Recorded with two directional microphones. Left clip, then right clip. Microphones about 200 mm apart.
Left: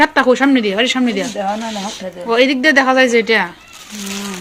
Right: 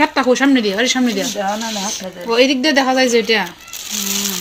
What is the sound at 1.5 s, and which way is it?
Speech, centre (ahead or behind).